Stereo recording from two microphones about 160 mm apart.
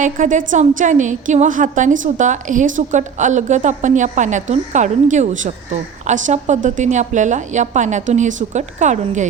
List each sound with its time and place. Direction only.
0.0 s a woman's voice: 55° right (ahead or behind)